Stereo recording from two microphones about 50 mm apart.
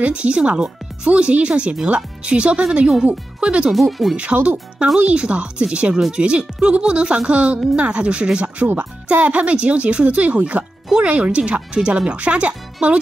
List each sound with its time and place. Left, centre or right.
0.0 s speech: right
3.7 s speech: centre
4.2 s speech: right